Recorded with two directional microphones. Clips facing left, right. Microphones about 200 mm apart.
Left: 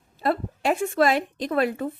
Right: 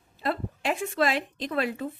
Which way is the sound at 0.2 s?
45° left (ahead or behind).